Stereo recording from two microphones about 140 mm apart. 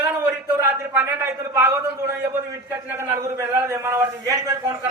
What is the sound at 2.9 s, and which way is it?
A man's voice, 20° right (ahead or behind).